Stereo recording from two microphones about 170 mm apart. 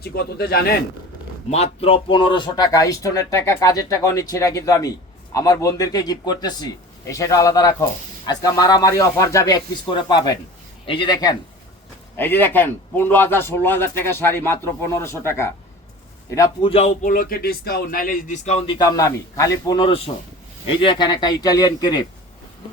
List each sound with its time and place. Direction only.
0.0 s speech: 65° left (ahead or behind)
1.5 s speech: 40° left (ahead or behind); by 11.3 s 25° left (ahead or behind)
12.1 s a man's voice: 10° left (ahead or behind)
16.6 s speech: 40° left (ahead or behind)